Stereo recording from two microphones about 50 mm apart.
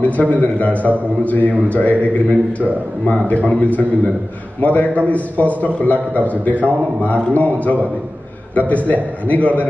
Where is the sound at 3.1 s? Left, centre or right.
Left.